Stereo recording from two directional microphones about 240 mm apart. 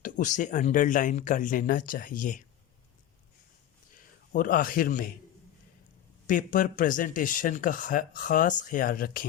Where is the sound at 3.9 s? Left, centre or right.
Left.